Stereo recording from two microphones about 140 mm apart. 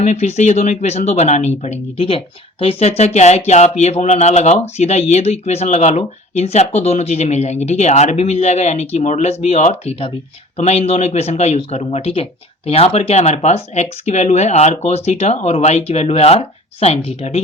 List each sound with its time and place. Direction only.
0.0 s speech: 55° left (ahead or behind)